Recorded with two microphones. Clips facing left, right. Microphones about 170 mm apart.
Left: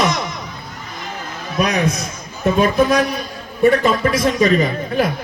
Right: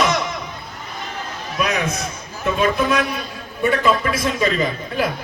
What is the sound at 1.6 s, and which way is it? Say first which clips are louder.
A man's voice: left 4 dB; 40° left (ahead or behind).